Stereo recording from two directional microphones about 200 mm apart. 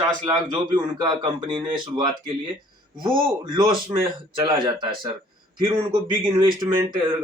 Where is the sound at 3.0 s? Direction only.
25° right (ahead or behind).